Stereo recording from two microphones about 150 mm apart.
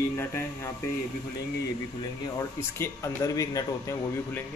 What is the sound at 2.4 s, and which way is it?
Speech, 15° left (ahead or behind).